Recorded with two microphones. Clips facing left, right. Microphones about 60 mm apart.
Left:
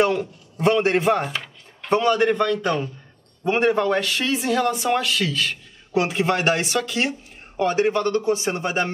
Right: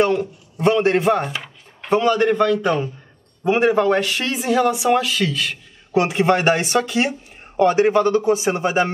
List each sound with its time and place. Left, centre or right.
0.0 s a man's voice: centre